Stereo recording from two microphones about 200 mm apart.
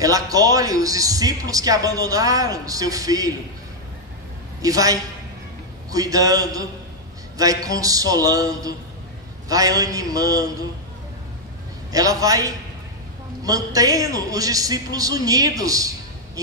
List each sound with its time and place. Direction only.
0.0 s a man's voice: 15° right (ahead or behind)
4.6 s a man's voice: 15° right (ahead or behind)
11.9 s a man's voice: 15° right (ahead or behind)